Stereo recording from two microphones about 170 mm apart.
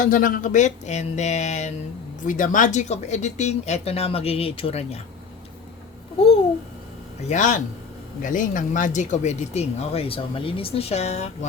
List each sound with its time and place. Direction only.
0.0 s speech: 55° left (ahead or behind)
7.3 s speech: 45° left (ahead or behind)